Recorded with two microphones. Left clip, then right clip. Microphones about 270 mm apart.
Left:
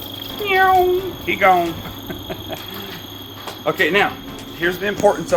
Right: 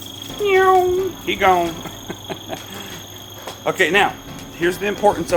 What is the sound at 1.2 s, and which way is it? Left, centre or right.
Speech, centre.